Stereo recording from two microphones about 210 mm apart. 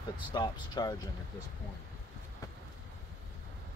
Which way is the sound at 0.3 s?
20° left (ahead or behind).